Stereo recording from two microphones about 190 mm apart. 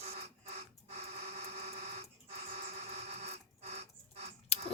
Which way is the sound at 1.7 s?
35° right (ahead or behind).